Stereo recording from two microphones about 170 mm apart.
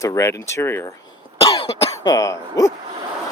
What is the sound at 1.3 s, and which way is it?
Cough, 20° left (ahead or behind).